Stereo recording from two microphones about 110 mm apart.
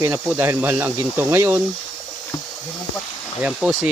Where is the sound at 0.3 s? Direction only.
20° right (ahead or behind).